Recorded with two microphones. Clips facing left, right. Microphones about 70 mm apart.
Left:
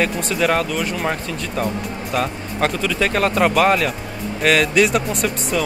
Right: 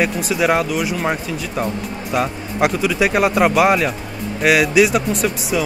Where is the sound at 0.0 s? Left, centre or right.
Centre.